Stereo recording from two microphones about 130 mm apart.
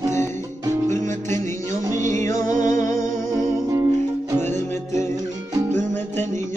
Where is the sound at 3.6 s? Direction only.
25° right (ahead or behind).